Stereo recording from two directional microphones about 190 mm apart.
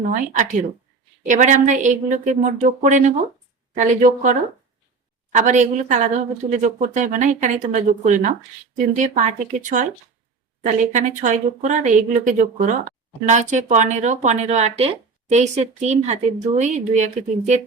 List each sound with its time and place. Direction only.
0.0 s speech: 40° right (ahead or behind)